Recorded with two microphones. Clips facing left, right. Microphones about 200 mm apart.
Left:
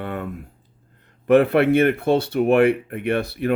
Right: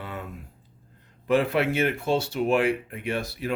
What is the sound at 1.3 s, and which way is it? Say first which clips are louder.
Speech: left 8 dB; 60° left (ahead or behind).